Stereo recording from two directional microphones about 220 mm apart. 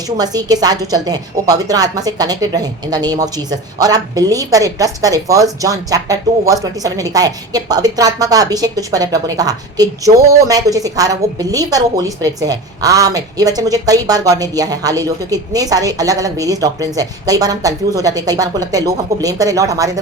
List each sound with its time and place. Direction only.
0.2 s a woman's voice: 15° right (ahead or behind)